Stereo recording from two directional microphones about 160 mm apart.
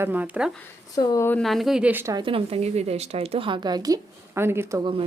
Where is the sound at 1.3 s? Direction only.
5° left (ahead or behind).